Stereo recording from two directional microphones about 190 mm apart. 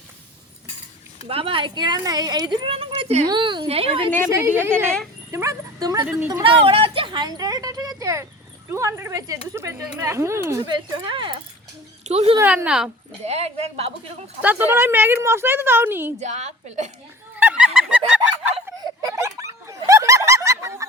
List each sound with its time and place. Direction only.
1.3 s speech: 30° right (ahead or behind)
4.3 s speech: 10° right (ahead or behind)
6.7 s speech: 30° right (ahead or behind)
12.4 s speech: 10° right (ahead or behind)
13.2 s speech: 35° right (ahead or behind)
14.4 s speech: 10° right (ahead or behind)
16.2 s speech: 35° right (ahead or behind)
17.3 s fowl: 5° right (ahead or behind)
18.8 s snicker: 15° right (ahead or behind)